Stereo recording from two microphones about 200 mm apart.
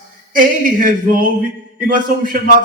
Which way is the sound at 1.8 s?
45° right (ahead or behind).